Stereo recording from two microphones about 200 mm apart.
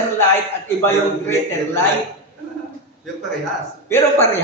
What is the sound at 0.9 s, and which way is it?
Speech, 10° left (ahead or behind).